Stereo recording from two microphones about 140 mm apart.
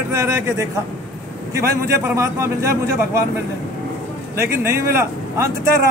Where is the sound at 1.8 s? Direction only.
20° right (ahead or behind).